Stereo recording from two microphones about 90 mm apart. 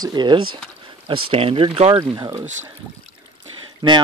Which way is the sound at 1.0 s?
90° right.